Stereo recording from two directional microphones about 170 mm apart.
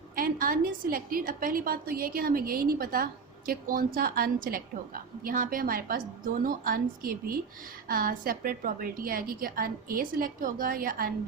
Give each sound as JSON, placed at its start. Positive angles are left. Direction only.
{"t": 0.2, "sound": "a woman's voice", "side_deg": -55}